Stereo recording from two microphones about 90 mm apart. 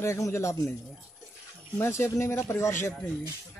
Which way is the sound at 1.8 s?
30° left (ahead or behind).